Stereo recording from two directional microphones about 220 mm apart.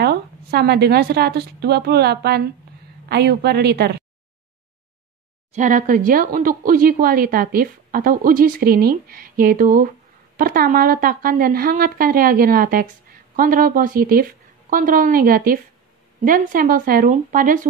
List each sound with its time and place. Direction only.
0.0 s a woman's voice: 45° right (ahead or behind)
5.5 s speech: 35° right (ahead or behind)